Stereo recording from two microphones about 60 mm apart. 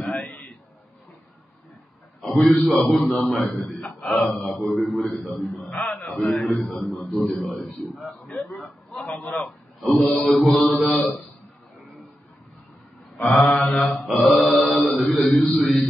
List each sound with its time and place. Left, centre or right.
0.0 s a sound: centre
2.7 s a man's voice: centre
8.4 s a man's voice: left
9.8 s a man's voice: centre
13.1 s mantra: centre